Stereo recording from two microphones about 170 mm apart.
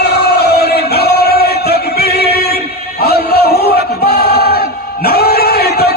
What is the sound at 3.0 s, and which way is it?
Music, 65° left (ahead or behind).